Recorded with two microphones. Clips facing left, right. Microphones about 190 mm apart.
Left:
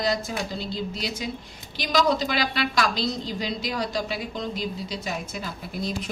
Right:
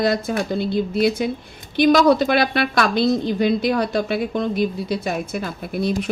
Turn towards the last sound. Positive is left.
turn(degrees=-65)  # may be behind; listen again after turning